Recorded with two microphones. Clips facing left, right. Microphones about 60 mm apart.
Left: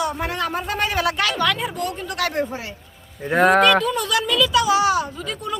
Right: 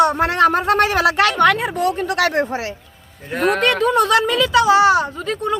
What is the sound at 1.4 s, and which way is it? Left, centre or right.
A woman's voice, right.